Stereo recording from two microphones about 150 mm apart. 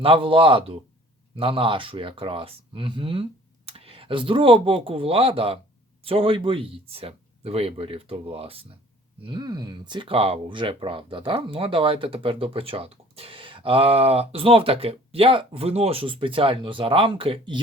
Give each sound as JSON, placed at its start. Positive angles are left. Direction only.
{"t": 0.0, "sound": "speech", "side_deg": -35}